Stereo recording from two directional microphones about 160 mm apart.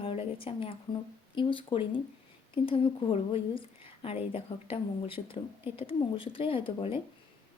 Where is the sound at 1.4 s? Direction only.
30° left (ahead or behind).